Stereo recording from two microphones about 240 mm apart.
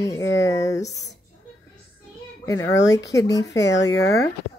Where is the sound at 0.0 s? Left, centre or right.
Centre.